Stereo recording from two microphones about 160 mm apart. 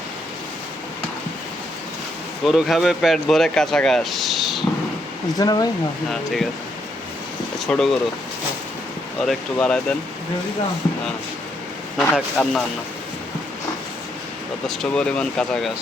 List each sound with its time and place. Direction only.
2.4 s speech: centre (ahead or behind)
5.4 s speech: 25° left (ahead or behind)
6.1 s speech: centre (ahead or behind)
7.7 s speech: centre (ahead or behind)
9.2 s speech: 5° left (ahead or behind)
11.9 s speech: centre (ahead or behind)
14.7 s speech: 5° left (ahead or behind)